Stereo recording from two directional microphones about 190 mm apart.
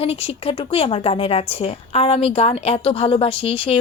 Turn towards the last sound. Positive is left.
turn(degrees=30)  # may be behind; listen again after turning